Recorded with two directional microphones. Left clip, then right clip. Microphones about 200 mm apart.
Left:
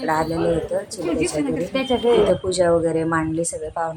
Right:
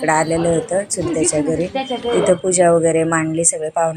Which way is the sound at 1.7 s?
50° left (ahead or behind).